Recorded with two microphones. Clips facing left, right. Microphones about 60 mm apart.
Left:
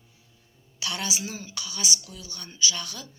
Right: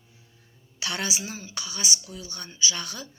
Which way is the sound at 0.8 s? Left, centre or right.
Right.